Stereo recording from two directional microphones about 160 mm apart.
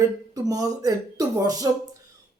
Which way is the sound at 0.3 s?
25° right (ahead or behind).